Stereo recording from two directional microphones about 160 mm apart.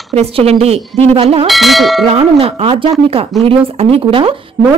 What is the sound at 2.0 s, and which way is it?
Speech, 35° right (ahead or behind).